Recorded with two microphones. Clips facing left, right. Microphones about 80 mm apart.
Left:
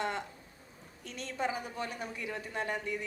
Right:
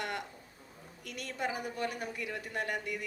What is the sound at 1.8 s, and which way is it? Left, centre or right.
Speech, right.